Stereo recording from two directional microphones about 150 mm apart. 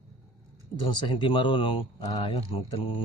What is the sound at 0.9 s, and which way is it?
Speech, 30° left (ahead or behind).